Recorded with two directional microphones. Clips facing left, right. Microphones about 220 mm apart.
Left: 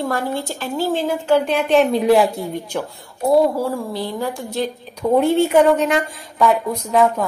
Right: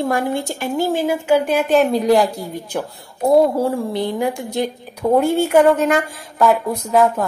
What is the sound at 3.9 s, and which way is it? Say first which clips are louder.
Speech: right 4 dB; 20° right (ahead or behind).